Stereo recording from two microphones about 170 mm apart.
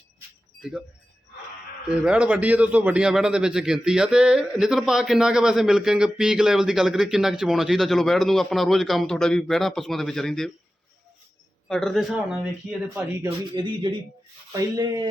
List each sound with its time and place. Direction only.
2.0 s a man's voice: 5° right (ahead or behind)
11.7 s a man's voice: centre (ahead or behind)
13.5 s speech: 25° right (ahead or behind)